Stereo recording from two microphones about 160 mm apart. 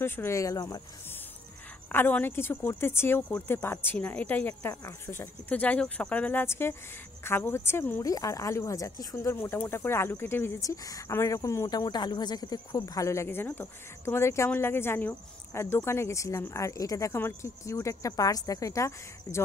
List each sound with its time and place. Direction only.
0.0 s speech: 15° left (ahead or behind)
1.9 s speech: 10° left (ahead or behind)